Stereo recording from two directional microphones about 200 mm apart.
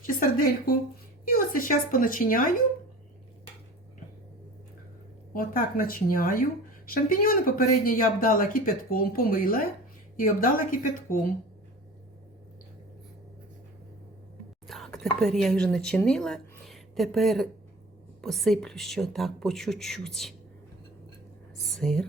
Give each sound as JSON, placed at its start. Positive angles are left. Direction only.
{"t": 0.0, "sound": "a woman's voice", "side_deg": 45}
{"t": 5.3, "sound": "speech", "side_deg": 45}
{"t": 14.7, "sound": "speech", "side_deg": 0}
{"t": 21.7, "sound": "speech", "side_deg": 0}